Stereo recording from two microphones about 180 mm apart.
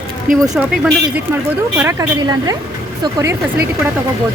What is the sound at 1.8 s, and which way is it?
Speech, 15° right (ahead or behind).